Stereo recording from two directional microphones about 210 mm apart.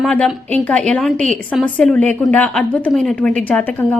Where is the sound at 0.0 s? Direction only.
5° left (ahead or behind).